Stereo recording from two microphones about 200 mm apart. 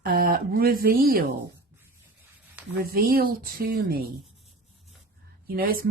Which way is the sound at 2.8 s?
50° right (ahead or behind).